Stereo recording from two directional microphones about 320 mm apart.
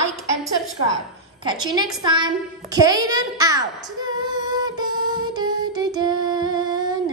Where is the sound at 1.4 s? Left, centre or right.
Centre.